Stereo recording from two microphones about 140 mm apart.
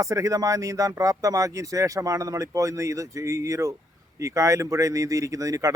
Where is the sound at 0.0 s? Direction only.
25° right (ahead or behind).